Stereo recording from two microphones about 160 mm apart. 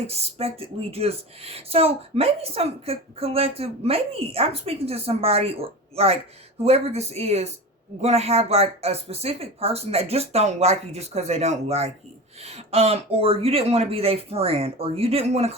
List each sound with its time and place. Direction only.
0.1 s a woman's voice: 40° right (ahead or behind)